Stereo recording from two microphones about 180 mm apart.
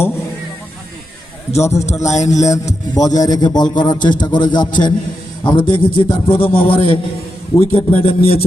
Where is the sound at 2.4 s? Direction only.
20° left (ahead or behind).